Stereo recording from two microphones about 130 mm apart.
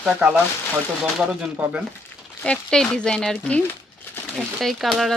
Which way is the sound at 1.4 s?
10° right (ahead or behind).